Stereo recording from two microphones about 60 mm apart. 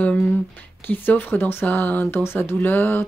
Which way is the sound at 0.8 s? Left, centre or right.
Left.